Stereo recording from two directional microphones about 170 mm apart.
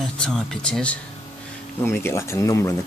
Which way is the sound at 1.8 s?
15° left (ahead or behind).